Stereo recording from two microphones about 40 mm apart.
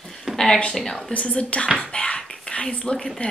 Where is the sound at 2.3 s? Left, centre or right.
Centre.